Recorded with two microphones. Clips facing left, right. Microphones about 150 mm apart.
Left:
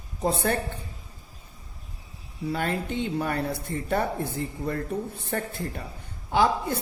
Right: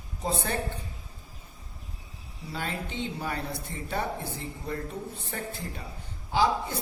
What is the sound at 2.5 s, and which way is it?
Speech, 55° left (ahead or behind).